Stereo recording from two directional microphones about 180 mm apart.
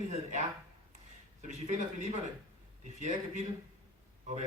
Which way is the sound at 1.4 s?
40° right (ahead or behind).